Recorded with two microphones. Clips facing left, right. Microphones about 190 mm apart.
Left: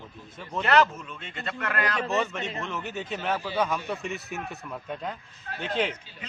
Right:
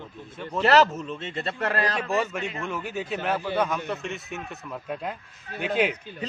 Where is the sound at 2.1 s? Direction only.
10° right (ahead or behind).